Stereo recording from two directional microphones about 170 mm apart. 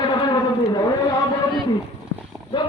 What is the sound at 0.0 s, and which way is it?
Vehicle, 25° left (ahead or behind).